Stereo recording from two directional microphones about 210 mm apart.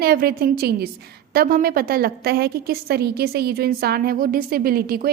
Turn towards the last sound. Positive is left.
turn(degrees=-45)  # may be behind; listen again after turning